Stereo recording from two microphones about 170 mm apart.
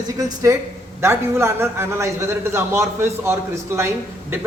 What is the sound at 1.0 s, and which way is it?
A man's voice, 15° right (ahead or behind).